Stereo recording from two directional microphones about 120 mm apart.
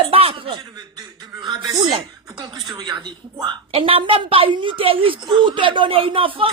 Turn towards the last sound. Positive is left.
turn(degrees=-50)  # may be behind; listen again after turning